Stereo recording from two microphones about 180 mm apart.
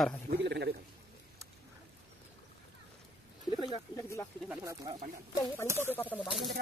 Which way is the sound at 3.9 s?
15° left (ahead or behind).